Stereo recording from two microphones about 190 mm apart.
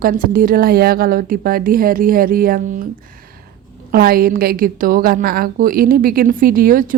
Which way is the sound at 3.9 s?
50° right (ahead or behind).